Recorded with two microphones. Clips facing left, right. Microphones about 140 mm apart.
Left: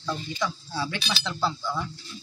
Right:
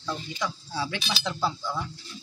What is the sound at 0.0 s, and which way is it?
Speech, 15° right (ahead or behind).